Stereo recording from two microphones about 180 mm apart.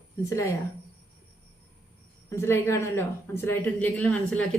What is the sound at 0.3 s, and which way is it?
Speech, 15° left (ahead or behind).